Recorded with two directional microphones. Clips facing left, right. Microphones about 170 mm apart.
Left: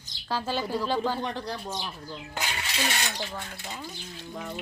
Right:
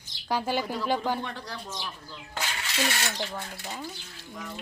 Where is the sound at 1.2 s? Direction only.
20° left (ahead or behind).